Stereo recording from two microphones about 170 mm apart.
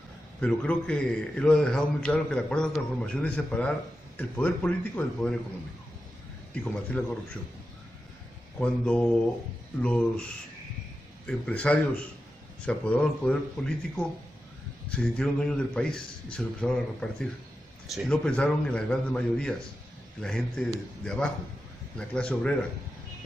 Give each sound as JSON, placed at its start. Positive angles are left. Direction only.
{"t": 0.4, "sound": "a man's voice", "side_deg": 5}
{"t": 6.5, "sound": "a man's voice", "side_deg": 5}
{"t": 8.5, "sound": "a man's voice", "side_deg": 5}